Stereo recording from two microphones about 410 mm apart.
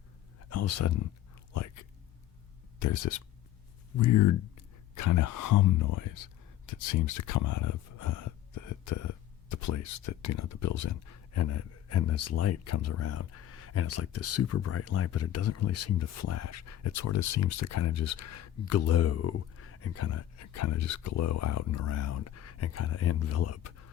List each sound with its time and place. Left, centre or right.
0.5 s speech: left
1.5 s a sound: left
2.7 s speech: left